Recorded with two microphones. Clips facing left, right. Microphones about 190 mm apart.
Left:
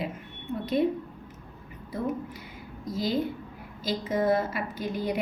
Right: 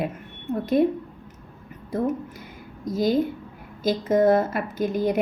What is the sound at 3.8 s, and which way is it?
A woman's voice, 45° right (ahead or behind).